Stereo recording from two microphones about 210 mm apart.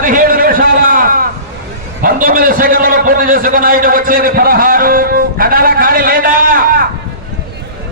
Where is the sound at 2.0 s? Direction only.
40° right (ahead or behind).